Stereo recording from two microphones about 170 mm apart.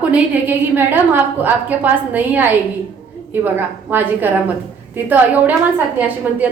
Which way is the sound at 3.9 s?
10° right (ahead or behind).